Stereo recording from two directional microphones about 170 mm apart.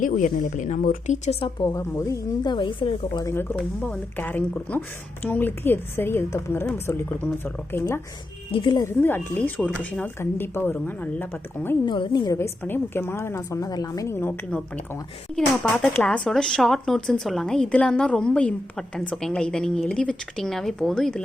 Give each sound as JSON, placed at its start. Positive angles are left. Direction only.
{"t": 0.0, "sound": "speech", "side_deg": 50}
{"t": 3.2, "sound": "speech", "side_deg": 10}
{"t": 8.5, "sound": "speech", "side_deg": 25}
{"t": 11.9, "sound": "speech", "side_deg": 25}